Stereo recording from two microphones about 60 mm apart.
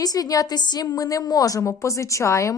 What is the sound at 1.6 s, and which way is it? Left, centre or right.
Speech, left.